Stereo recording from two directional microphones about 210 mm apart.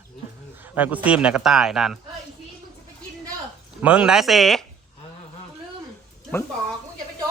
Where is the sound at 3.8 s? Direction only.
5° right (ahead or behind).